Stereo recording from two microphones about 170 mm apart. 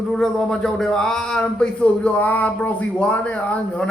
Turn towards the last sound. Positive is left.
turn(degrees=5)  # may be behind; listen again after turning